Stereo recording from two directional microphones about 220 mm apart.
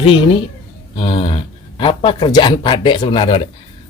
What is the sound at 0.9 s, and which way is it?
Speech, 25° left (ahead or behind).